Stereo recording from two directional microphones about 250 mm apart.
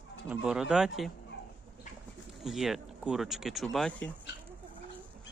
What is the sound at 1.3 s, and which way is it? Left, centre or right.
Dog, left.